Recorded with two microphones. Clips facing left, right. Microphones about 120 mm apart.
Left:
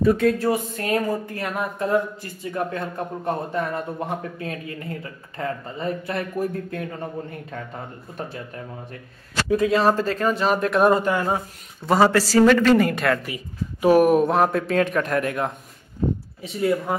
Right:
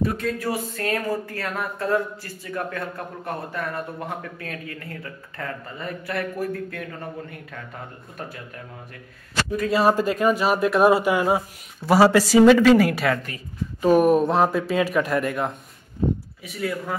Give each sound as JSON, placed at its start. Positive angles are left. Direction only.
{"t": 0.4, "sound": "speech", "side_deg": 20}
{"t": 9.7, "sound": "speech", "side_deg": -10}
{"t": 13.3, "sound": "speech", "side_deg": 10}
{"t": 16.4, "sound": "speech", "side_deg": 25}